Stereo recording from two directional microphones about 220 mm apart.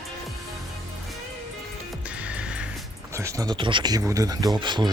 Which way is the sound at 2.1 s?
5° right (ahead or behind).